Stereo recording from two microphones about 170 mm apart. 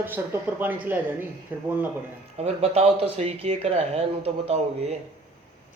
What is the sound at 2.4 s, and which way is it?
Speech, 40° right (ahead or behind).